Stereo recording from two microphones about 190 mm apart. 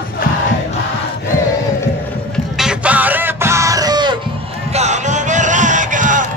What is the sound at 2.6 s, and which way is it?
Music, 5° right (ahead or behind).